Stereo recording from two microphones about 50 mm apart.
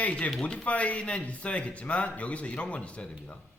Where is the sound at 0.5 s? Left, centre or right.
Left.